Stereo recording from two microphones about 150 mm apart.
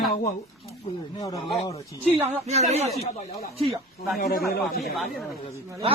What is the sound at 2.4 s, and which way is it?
Speech, 45° right (ahead or behind).